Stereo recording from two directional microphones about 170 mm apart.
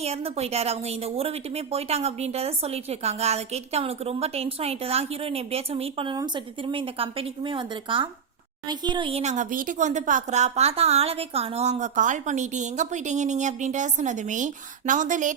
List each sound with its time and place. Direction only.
0.0 s a woman's voice: 35° right (ahead or behind)